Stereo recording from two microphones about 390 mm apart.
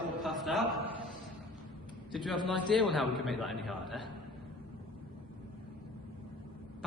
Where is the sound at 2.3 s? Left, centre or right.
Centre.